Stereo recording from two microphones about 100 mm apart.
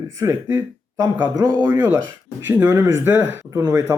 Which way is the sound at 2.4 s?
20° right (ahead or behind).